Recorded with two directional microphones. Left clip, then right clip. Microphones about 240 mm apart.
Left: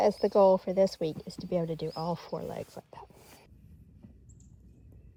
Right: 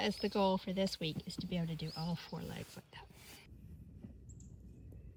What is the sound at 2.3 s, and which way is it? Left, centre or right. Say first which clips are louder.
Speech: left 11 dB; right.